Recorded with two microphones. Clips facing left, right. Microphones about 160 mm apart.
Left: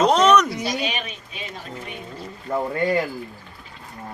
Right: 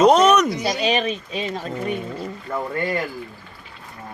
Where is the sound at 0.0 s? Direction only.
10° right (ahead or behind).